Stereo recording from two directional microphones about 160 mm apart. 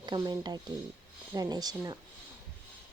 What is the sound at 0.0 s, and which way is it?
Speech, 25° right (ahead or behind).